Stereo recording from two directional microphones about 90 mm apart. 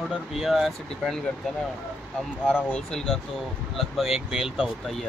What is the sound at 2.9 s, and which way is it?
Speech, 5° left (ahead or behind).